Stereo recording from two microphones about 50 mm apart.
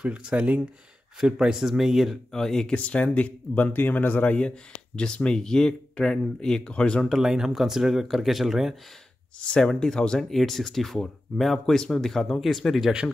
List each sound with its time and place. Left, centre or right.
0.0 s speech: right
1.2 s speech: centre
2.3 s speech: centre
2.7 s speech: left
7.2 s speech: centre
9.5 s speech: centre